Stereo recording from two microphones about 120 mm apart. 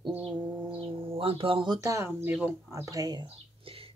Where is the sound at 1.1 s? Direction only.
50° right (ahead or behind).